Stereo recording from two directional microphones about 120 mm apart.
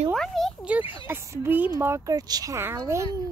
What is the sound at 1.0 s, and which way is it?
Speech, 20° right (ahead or behind).